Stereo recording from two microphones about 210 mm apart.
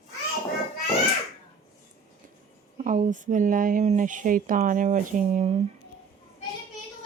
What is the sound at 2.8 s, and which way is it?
Speech, 35° right (ahead or behind).